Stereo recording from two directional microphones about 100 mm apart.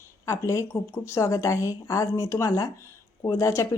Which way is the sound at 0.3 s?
30° left (ahead or behind).